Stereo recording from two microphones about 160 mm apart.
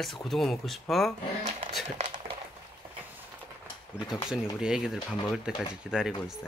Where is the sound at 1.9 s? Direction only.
50° right (ahead or behind).